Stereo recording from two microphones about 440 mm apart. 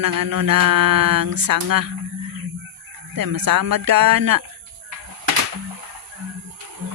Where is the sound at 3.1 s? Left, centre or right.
Right.